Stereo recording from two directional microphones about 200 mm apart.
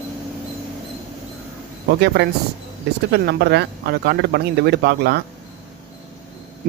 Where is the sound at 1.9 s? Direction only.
55° right (ahead or behind).